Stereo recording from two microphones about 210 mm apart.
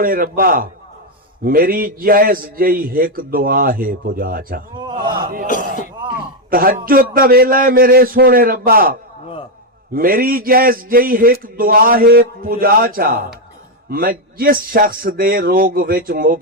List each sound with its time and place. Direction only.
0.0 s a man's voice: 45° right (ahead or behind)
4.8 s a sound: 20° right (ahead or behind)
5.5 s cough: 40° left (ahead or behind)
6.5 s a man's voice: 45° right (ahead or behind)